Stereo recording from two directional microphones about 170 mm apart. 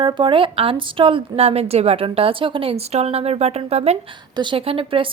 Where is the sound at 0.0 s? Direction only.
30° right (ahead or behind).